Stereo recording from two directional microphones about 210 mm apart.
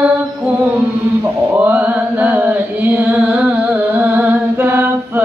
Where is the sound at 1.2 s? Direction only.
10° right (ahead or behind).